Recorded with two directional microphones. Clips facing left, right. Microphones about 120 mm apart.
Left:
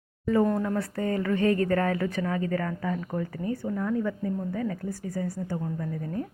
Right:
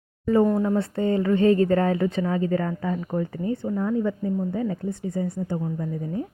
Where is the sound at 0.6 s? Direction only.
25° right (ahead or behind).